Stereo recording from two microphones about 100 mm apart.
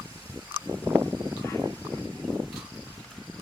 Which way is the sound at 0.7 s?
25° right (ahead or behind).